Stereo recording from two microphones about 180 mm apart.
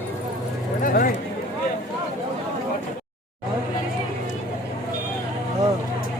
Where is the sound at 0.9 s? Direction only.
50° left (ahead or behind).